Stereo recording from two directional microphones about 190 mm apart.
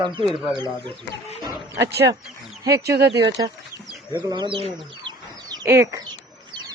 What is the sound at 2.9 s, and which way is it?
Speech, 60° right (ahead or behind).